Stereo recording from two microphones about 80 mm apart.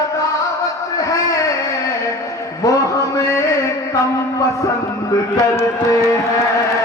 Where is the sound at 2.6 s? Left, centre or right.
Left.